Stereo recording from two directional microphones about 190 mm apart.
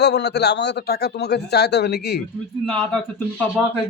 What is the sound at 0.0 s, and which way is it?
Speech, 65° left (ahead or behind).